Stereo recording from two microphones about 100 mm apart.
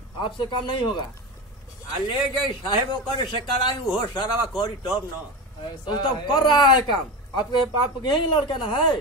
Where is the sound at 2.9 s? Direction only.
50° left (ahead or behind).